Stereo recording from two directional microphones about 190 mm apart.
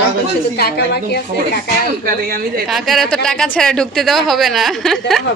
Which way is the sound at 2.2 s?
50° right (ahead or behind).